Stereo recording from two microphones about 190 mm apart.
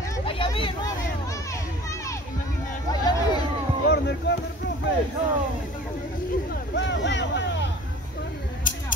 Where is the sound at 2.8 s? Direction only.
20° left (ahead or behind).